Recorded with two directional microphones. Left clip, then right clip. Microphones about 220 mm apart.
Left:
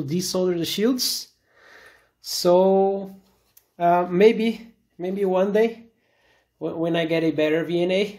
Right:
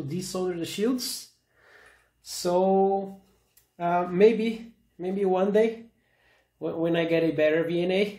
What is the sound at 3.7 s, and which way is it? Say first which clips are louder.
Speech: left 5 dB; 25° left (ahead or behind).